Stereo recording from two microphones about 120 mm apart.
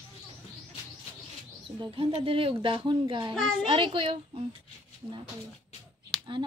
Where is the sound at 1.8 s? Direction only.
50° right (ahead or behind).